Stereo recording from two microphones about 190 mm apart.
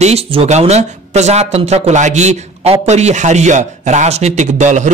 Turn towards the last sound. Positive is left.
turn(degrees=-40)  # may be behind; listen again after turning